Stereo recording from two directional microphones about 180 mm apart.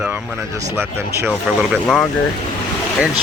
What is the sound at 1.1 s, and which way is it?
Speech, 10° right (ahead or behind).